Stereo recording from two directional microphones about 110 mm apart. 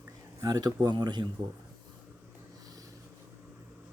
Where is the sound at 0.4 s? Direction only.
35° right (ahead or behind).